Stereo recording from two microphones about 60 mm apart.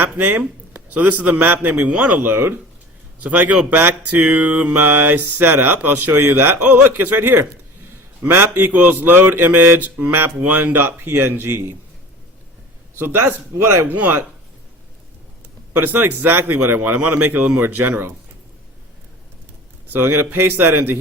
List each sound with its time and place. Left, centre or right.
0.0 s a man's voice: right
1.9 s mantra: right
13.0 s mantra: right
15.7 s mantra: right
19.9 s mantra: right